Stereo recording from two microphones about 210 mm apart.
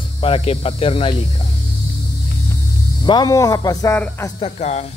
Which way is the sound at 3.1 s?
20° left (ahead or behind).